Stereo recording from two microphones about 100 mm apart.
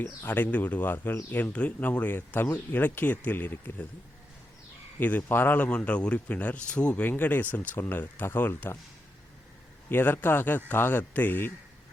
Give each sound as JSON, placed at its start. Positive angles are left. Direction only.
{"t": 0.0, "sound": "speech", "side_deg": 20}
{"t": 4.9, "sound": "speech", "side_deg": 20}
{"t": 9.9, "sound": "speech", "side_deg": 20}